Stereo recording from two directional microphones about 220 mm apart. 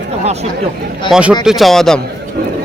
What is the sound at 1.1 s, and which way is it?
Speech, 5° right (ahead or behind).